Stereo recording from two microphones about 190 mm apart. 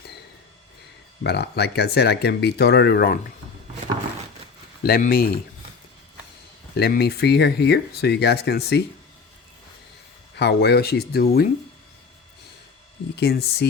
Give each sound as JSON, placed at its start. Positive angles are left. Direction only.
{"t": 1.2, "sound": "speech", "side_deg": 60}
{"t": 4.8, "sound": "speech", "side_deg": 50}
{"t": 6.7, "sound": "speech", "side_deg": 55}
{"t": 10.3, "sound": "speech", "side_deg": 60}
{"t": 13.1, "sound": "speech", "side_deg": 60}